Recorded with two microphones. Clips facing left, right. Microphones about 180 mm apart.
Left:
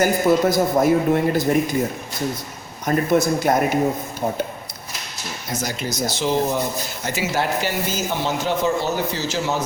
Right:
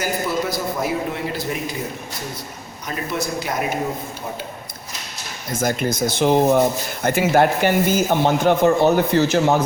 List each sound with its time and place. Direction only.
0.0 s a man's voice: 50° left (ahead or behind)
2.8 s a man's voice: 50° left (ahead or behind)
5.5 s speech: 55° right (ahead or behind)